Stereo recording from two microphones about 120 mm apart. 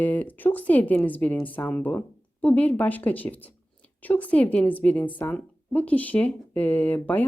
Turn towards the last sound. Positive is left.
turn(degrees=15)  # may be behind; listen again after turning